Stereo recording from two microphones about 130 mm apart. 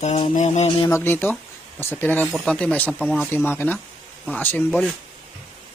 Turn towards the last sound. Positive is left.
turn(degrees=10)  # may be behind; listen again after turning